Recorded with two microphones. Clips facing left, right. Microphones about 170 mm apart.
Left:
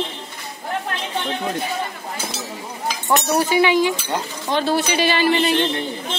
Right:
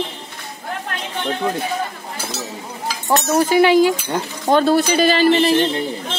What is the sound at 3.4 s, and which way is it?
Speech, 45° right (ahead or behind).